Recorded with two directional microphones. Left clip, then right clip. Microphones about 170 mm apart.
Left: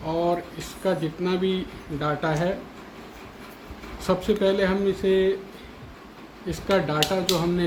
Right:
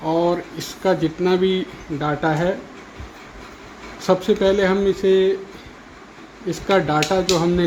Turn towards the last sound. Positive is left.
turn(degrees=-50)  # may be behind; listen again after turning